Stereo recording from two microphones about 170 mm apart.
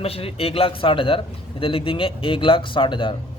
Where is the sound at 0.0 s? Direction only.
35° left (ahead or behind).